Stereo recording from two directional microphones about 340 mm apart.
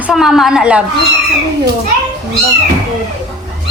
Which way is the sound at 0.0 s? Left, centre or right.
Centre.